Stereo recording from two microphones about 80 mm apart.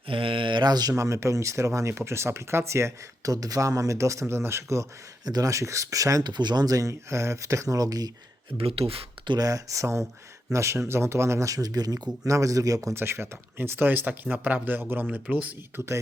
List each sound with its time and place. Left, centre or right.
0.1 s mantra: right
0.9 s speech: right
3.3 s speech: right
5.2 s speech: right
6.2 s speech: right
8.5 s speech: right
9.4 s speech: right
12.9 s speech: right